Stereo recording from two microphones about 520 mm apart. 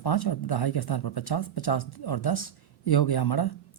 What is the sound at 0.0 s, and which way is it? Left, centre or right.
Speech, left.